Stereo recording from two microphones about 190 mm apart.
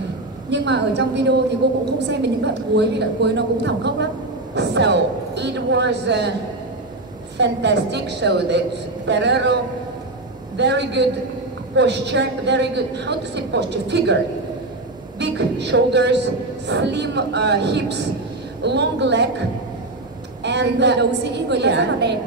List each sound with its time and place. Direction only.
0.5 s a woman's voice: 65° right (ahead or behind)
7.3 s a woman's voice: 65° right (ahead or behind)
10.6 s a woman's voice: 65° right (ahead or behind)
15.1 s a woman's voice: 65° right (ahead or behind)
20.4 s a woman's voice: 65° right (ahead or behind)